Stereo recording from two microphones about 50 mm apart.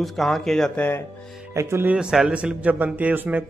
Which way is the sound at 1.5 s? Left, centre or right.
Right.